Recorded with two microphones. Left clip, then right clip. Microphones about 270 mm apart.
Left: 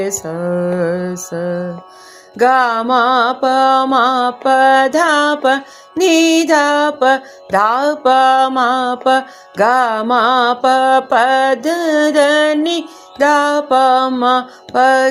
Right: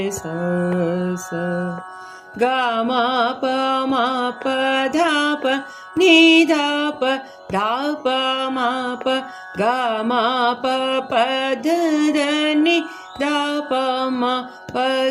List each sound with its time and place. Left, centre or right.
0.2 s mantra: left